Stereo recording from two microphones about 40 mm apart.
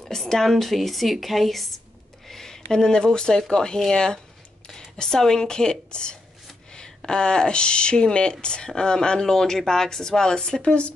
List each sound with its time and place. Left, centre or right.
0.1 s speech: centre
4.6 s a sound: centre
5.2 s a woman's voice: centre